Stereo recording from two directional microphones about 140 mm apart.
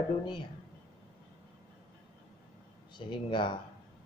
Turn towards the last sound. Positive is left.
turn(degrees=35)  # may be behind; listen again after turning